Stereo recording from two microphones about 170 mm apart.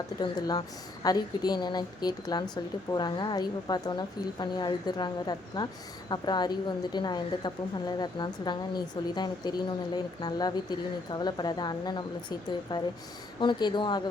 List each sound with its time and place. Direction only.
0.2 s a woman's voice: 25° left (ahead or behind)